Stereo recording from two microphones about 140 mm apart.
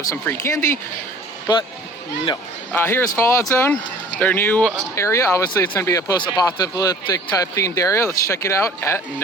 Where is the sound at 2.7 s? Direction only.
15° left (ahead or behind).